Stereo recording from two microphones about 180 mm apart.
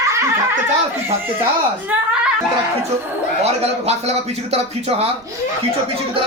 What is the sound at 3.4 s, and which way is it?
A man's voice, 35° right (ahead or behind).